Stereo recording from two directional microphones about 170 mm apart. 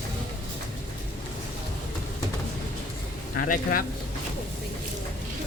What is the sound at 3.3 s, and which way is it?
Speech, 55° left (ahead or behind).